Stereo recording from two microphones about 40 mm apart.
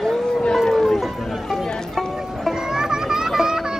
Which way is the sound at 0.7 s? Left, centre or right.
Centre.